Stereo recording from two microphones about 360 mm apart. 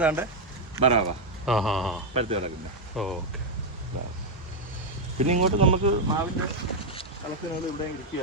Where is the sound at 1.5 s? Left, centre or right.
Centre.